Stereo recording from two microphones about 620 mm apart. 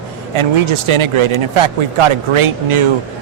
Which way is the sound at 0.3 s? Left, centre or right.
Right.